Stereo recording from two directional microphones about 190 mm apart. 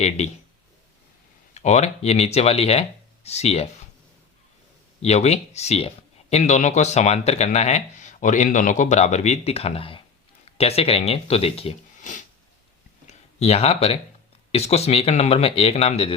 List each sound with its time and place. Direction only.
1.5 s speech: 35° left (ahead or behind)
5.0 s speech: 35° left (ahead or behind)